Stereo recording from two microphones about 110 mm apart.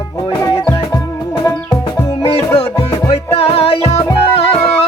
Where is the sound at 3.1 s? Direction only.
65° left (ahead or behind).